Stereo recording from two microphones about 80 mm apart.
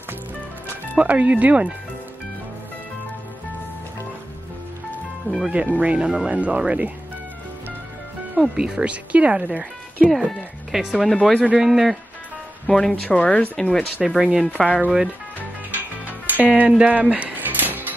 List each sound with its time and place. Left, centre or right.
0.9 s speech: centre
5.3 s speech: left
5.8 s speech: centre
8.4 s speech: centre
10.1 s speech: centre
12.6 s speech: centre
14.0 s speech: centre
14.4 s speech: centre
15.7 s music: right